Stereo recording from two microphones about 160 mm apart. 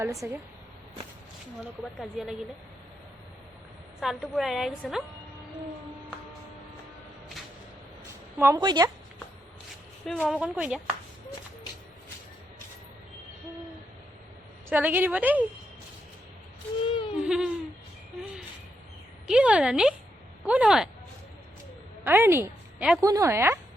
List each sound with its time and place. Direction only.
0.0 s speech: 20° right (ahead or behind)
2.0 s a woman's voice: 5° right (ahead or behind)
4.0 s a woman's voice: centre (ahead or behind)
8.4 s a woman's voice: 15° right (ahead or behind)
8.6 s speech: 25° right (ahead or behind)
10.1 s a woman's voice: 5° left (ahead or behind)
10.3 s a woman's voice: 5° right (ahead or behind)
14.7 s a woman's voice: 10° right (ahead or behind)
16.8 s a sound: 35° left (ahead or behind)
17.2 s a sound: 5° right (ahead or behind)
19.3 s a woman's voice: 5° right (ahead or behind)
22.0 s a woman's voice: 15° right (ahead or behind)